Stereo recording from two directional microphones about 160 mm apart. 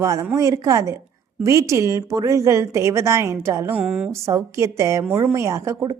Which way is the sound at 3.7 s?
5° right (ahead or behind).